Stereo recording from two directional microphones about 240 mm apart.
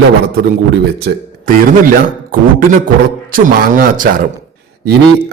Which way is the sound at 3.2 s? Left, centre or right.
Right.